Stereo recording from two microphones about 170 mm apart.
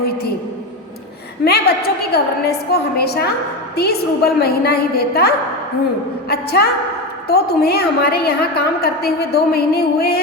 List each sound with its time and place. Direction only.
0.0 s a woman's voice: 65° left (ahead or behind)
1.5 s a woman's voice: 65° left (ahead or behind)